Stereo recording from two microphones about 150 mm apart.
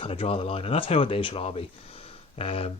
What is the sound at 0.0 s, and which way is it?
Speech, 40° left (ahead or behind).